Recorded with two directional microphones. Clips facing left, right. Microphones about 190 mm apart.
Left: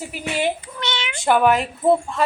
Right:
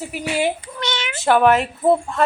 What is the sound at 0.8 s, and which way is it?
Meow, 45° right (ahead or behind).